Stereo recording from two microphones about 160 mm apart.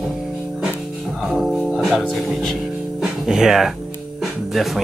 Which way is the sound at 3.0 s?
5° right (ahead or behind).